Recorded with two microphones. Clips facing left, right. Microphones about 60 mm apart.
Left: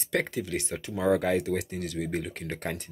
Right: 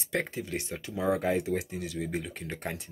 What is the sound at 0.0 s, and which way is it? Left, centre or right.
Speech, left.